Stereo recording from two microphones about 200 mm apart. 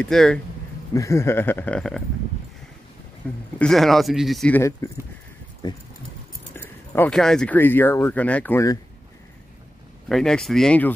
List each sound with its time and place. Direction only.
0.0 s speech: 5° left (ahead or behind)
0.9 s speech: 15° left (ahead or behind)
3.5 s speech: centre (ahead or behind)
5.6 s dog: 20° left (ahead or behind)
6.5 s speech: 10° left (ahead or behind)
10.0 s speech: 5° left (ahead or behind)